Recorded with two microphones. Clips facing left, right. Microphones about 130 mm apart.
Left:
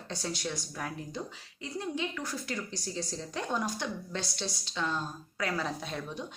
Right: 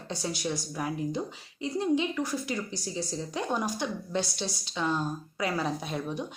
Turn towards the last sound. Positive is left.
turn(degrees=-15)  # may be behind; listen again after turning